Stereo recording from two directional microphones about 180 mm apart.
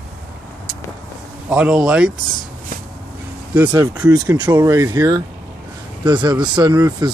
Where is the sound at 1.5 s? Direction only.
5° right (ahead or behind).